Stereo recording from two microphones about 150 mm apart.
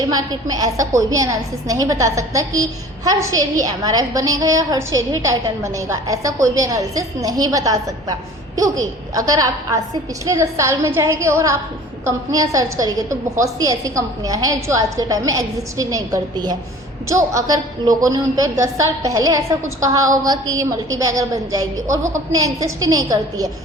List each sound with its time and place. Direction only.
0.1 s a woman's voice: 25° right (ahead or behind)